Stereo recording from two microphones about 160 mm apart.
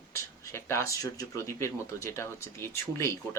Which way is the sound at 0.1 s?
15° left (ahead or behind).